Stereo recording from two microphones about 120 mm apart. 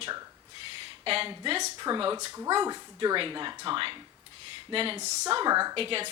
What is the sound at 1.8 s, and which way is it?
Speech, 40° right (ahead or behind).